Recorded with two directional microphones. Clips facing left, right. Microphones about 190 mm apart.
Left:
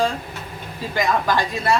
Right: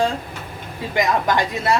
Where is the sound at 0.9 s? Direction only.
20° right (ahead or behind).